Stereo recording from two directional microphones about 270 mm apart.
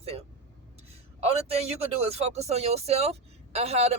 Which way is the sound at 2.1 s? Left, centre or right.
Right.